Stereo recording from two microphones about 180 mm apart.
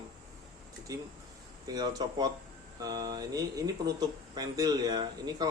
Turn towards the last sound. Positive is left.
turn(degrees=-25)  # may be behind; listen again after turning